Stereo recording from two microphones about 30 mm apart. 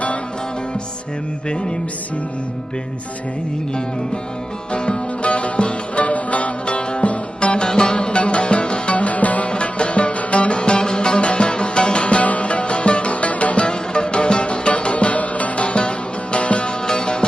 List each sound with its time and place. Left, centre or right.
4.7 s music: left
6.7 s music: left
7.7 s music: left
7.9 s music: left
9.0 s music: left
9.5 s music: left
13.7 s music: left
16.8 s music: left